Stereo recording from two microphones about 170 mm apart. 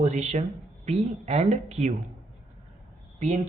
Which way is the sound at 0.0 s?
45° right (ahead or behind).